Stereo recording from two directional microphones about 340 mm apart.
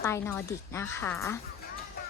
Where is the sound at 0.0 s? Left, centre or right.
Centre.